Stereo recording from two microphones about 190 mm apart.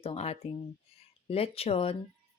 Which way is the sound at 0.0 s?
30° left (ahead or behind).